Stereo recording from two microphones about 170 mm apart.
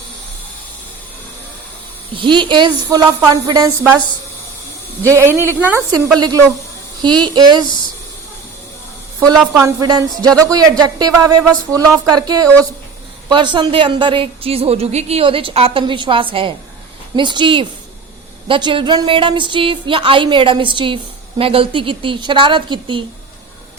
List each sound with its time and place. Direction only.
2.1 s speech: 30° right (ahead or behind)
5.1 s a woman's voice: 15° right (ahead or behind)
6.1 s speech: 25° right (ahead or behind)
9.6 s a woman's voice: 20° right (ahead or behind)